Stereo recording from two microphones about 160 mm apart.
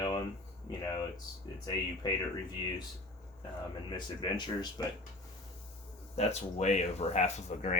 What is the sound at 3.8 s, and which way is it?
Speech, 25° left (ahead or behind).